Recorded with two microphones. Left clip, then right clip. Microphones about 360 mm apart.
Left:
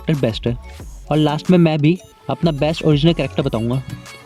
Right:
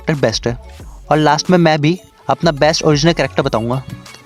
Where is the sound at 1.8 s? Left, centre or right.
Right.